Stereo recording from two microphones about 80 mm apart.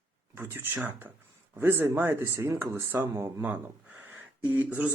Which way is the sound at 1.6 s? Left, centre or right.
Right.